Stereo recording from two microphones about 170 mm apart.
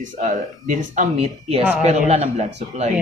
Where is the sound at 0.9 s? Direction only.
35° right (ahead or behind).